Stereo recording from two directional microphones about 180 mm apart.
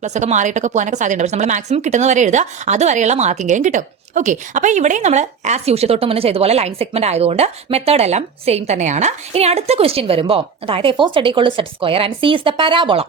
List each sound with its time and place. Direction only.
0.0 s speech: 40° right (ahead or behind)